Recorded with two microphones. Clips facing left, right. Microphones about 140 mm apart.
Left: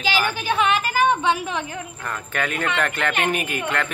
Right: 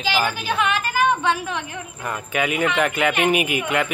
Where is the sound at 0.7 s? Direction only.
15° left (ahead or behind).